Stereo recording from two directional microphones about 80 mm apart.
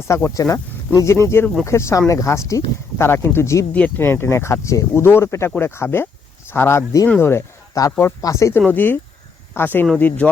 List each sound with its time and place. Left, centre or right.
0.1 s speech: left
3.8 s speech: left
8.6 s speech: left